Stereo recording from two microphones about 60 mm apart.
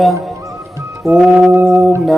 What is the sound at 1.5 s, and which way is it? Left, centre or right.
Organ, right.